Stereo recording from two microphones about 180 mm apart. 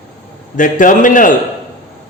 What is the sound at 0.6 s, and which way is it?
Speech, 45° left (ahead or behind).